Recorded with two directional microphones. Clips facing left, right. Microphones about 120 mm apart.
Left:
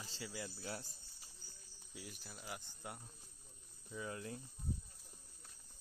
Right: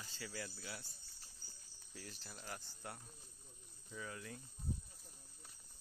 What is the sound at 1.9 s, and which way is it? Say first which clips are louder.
Speech: left 1 dB; 10° left (ahead or behind).